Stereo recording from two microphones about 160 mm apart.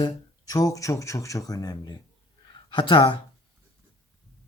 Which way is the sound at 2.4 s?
30° left (ahead or behind).